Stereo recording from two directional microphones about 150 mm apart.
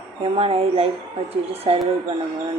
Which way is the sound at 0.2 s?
40° right (ahead or behind).